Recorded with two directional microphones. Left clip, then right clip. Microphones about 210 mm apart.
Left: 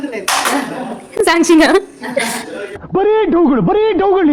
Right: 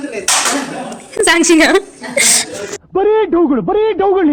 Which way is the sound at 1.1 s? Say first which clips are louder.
Even; centre (ahead or behind).